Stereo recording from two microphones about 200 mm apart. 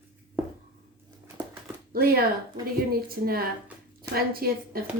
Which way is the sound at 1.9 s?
50° right (ahead or behind).